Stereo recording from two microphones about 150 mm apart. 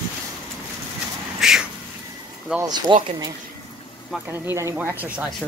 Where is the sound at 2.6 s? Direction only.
25° right (ahead or behind).